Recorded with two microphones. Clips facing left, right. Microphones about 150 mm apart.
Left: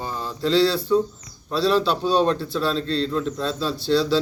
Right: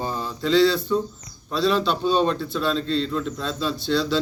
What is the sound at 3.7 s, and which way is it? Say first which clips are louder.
Speech: left 4 dB; 35° left (ahead or behind).